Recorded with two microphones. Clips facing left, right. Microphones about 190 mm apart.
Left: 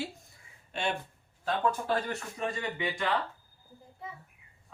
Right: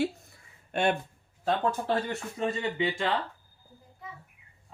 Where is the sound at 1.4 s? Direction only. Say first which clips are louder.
Right 2 dB; 25° right (ahead or behind).